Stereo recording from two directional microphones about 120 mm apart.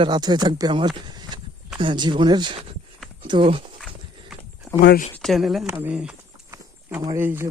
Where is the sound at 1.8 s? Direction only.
40° right (ahead or behind).